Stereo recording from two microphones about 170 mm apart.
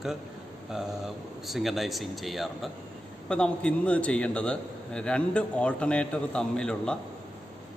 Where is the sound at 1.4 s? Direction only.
Centre (ahead or behind).